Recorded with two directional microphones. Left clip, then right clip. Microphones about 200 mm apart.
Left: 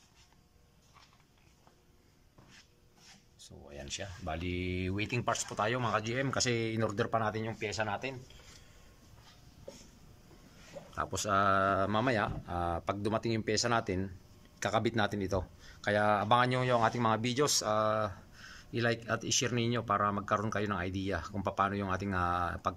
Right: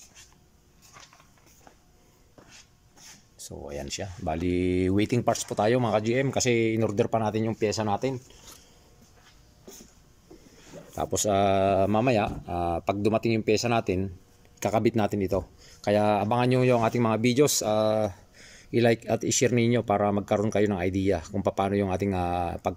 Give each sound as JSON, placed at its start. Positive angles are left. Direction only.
{"t": 3.3, "sound": "speech", "side_deg": -30}
{"t": 11.0, "sound": "speech", "side_deg": -20}